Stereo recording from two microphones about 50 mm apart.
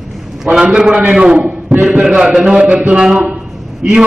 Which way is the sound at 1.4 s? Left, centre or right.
Right.